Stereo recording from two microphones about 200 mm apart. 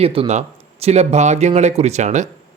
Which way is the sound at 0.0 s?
30° right (ahead or behind).